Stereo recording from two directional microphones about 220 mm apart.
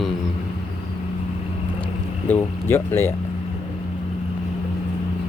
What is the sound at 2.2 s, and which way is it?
Speech, 10° left (ahead or behind).